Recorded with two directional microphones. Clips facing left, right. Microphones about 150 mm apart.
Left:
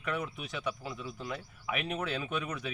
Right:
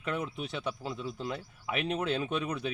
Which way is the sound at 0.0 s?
25° right (ahead or behind).